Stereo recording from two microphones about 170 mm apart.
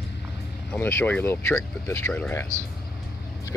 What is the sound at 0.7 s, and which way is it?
Speech, 10° left (ahead or behind).